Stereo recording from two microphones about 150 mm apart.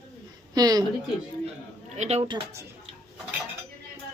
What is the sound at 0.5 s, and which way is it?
Speech, 25° right (ahead or behind).